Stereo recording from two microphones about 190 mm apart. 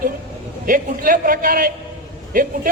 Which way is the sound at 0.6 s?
45° right (ahead or behind).